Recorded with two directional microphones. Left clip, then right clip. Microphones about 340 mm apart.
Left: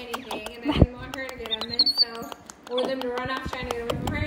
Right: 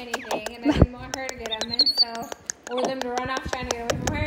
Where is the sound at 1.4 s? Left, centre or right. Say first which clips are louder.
Right 1 dB; right.